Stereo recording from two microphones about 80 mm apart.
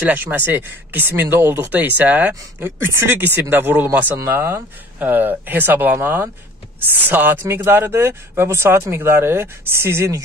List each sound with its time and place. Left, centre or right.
0.0 s speech: right